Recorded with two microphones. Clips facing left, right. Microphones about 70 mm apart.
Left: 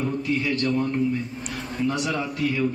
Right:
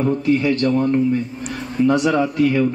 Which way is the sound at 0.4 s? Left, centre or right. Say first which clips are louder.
Right 6 dB; right.